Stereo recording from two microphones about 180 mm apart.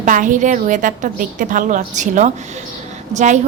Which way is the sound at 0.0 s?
45° right (ahead or behind).